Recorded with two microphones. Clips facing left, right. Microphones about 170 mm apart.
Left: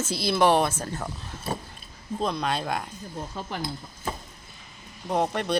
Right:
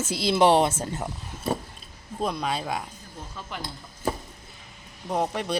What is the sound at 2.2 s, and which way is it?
Speech, 5° right (ahead or behind).